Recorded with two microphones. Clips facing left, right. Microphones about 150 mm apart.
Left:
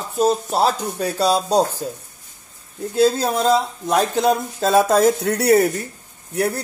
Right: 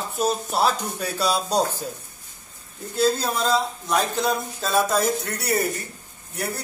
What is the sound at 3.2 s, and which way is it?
Speech, 50° left (ahead or behind).